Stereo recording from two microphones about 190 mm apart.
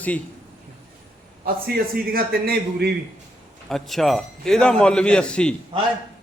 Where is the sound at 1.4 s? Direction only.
50° right (ahead or behind).